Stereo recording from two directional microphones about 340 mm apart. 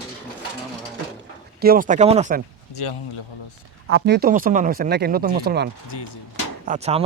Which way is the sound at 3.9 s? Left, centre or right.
Right.